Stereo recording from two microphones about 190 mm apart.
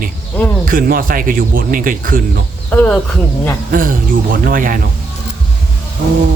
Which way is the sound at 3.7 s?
45° right (ahead or behind).